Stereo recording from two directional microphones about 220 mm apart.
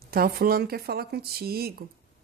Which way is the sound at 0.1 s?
45° right (ahead or behind).